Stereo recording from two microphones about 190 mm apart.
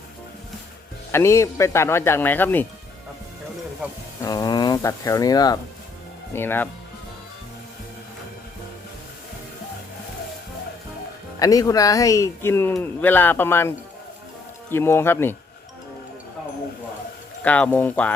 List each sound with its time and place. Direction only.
1.1 s speech: 15° left (ahead or behind)
4.2 s speech: 20° left (ahead or behind)
11.3 s speech: 20° left (ahead or behind)
17.4 s speech: 5° left (ahead or behind)